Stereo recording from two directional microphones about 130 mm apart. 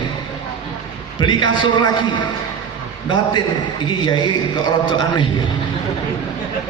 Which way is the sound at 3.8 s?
35° left (ahead or behind).